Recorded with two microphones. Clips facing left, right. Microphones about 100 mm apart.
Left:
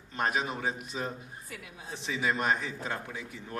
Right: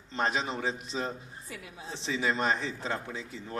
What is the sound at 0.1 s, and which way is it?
A man's voice, 25° right (ahead or behind).